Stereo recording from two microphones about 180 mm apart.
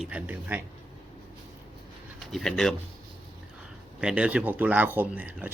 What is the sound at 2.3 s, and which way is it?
Speech, centre (ahead or behind).